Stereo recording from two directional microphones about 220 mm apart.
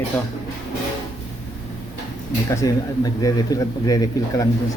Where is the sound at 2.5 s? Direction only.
15° left (ahead or behind).